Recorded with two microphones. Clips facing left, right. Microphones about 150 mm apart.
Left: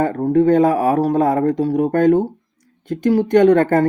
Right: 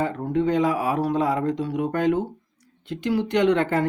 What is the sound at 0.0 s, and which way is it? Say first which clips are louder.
Speech: left 8 dB; 45° left (ahead or behind).